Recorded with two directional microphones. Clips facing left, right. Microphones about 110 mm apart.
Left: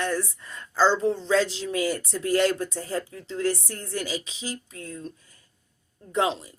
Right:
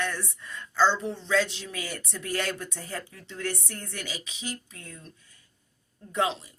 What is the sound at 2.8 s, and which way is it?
Speech, 20° left (ahead or behind).